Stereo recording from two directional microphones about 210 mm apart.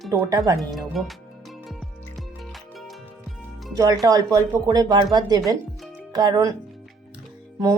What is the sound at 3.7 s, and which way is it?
Speech, 15° right (ahead or behind).